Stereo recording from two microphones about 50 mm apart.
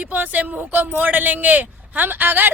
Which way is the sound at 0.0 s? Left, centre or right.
Right.